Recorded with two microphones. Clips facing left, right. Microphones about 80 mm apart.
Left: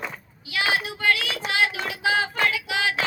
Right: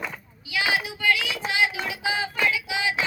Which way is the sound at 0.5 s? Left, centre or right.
Left.